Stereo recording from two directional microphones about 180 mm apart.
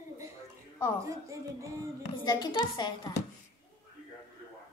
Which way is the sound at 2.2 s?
25° left (ahead or behind).